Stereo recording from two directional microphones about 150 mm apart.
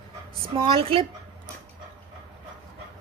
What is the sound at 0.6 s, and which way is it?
Speech, 40° right (ahead or behind).